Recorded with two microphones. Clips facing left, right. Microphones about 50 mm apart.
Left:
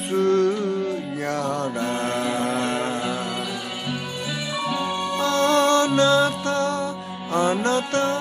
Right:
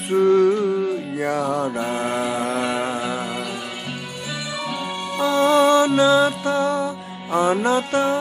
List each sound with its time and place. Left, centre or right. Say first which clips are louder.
0.1 s music: right 4 dB; centre
4.6 s music: left 5 dB; centre